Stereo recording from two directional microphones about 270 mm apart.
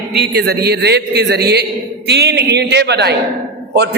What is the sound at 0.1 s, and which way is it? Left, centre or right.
A man's voice, right.